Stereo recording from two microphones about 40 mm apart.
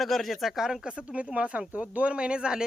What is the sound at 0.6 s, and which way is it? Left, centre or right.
Speech, centre.